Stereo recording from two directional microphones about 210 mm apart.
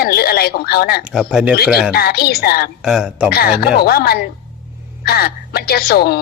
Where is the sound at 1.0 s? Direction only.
5° right (ahead or behind).